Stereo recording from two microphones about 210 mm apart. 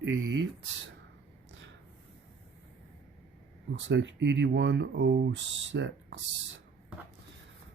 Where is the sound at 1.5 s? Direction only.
60° right (ahead or behind).